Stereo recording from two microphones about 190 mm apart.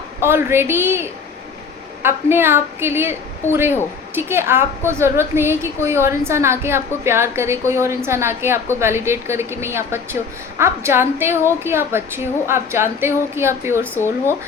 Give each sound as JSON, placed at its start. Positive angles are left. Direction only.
{"t": 0.2, "sound": "a woman's voice", "side_deg": -15}